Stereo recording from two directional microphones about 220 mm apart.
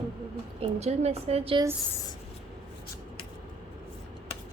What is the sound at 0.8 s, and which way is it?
Speech, 30° right (ahead or behind).